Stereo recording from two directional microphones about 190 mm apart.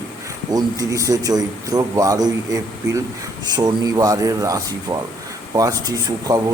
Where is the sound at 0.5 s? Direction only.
20° right (ahead or behind).